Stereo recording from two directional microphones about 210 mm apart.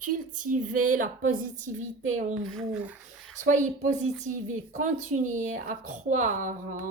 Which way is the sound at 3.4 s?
35° right (ahead or behind).